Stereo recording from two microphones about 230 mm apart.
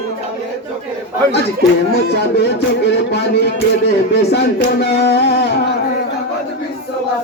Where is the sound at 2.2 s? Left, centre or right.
Left.